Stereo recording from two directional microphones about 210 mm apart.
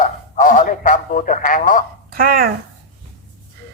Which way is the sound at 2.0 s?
45° right (ahead or behind).